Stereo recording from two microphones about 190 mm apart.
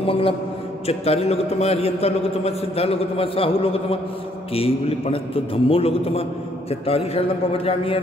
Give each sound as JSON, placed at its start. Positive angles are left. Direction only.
{"t": 0.0, "sound": "a man's voice", "side_deg": 30}